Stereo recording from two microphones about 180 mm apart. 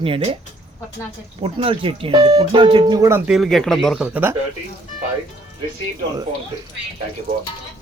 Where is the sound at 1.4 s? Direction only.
30° right (ahead or behind); by 3.2 s 15° right (ahead or behind).